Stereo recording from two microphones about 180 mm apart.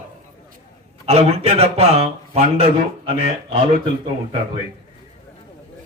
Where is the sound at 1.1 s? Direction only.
35° right (ahead or behind).